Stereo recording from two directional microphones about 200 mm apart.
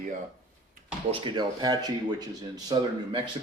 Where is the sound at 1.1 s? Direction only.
25° right (ahead or behind).